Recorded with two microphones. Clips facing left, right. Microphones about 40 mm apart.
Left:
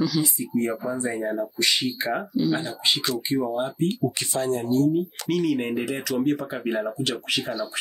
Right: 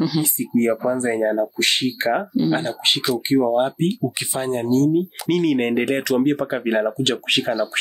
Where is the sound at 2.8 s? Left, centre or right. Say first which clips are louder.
Right 4 dB; right.